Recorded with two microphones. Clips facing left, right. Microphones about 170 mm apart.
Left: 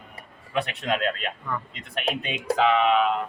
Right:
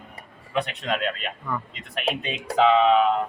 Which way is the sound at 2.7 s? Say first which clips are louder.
Right 4 dB; 30° right (ahead or behind).